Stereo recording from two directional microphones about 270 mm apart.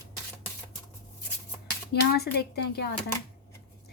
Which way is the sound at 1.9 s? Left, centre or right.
Left.